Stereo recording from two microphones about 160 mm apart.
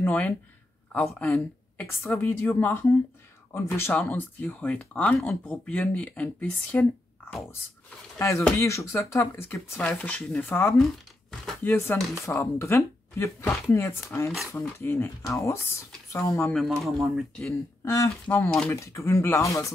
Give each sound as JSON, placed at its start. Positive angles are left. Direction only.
{"t": 0.0, "sound": "speech", "side_deg": 10}
{"t": 1.9, "sound": "speech", "side_deg": 15}
{"t": 10.8, "sound": "a sound", "side_deg": 5}
{"t": 11.7, "sound": "speech", "side_deg": 15}
{"t": 16.5, "sound": "speech", "side_deg": 0}
{"t": 17.5, "sound": "speech", "side_deg": 20}
{"t": 18.7, "sound": "speech", "side_deg": 20}